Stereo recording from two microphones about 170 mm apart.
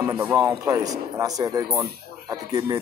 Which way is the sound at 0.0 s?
15° right (ahead or behind).